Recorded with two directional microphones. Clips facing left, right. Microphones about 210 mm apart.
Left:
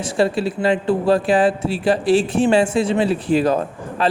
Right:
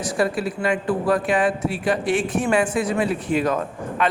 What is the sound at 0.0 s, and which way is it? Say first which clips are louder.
Speech: left 4 dB; 25° left (ahead or behind).